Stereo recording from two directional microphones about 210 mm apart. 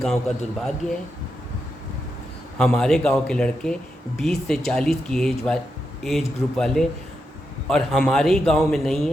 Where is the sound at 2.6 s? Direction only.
Centre (ahead or behind).